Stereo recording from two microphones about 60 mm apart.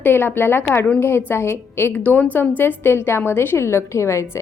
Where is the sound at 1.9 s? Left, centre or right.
Left.